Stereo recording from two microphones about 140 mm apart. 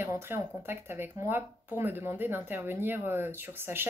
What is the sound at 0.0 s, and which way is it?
Speech, 15° right (ahead or behind).